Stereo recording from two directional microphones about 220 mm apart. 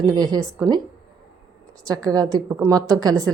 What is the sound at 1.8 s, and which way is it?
Speech, 15° right (ahead or behind).